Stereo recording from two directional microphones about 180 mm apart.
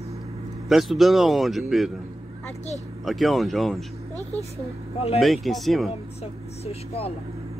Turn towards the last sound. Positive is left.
turn(degrees=35)  # may be behind; listen again after turning